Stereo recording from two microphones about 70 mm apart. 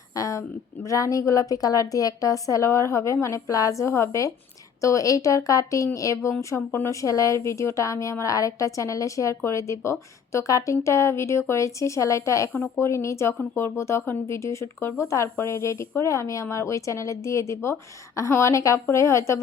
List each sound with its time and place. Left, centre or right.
0.1 s a woman's voice: left
6.7 s speech: left
7.0 s a woman's voice: left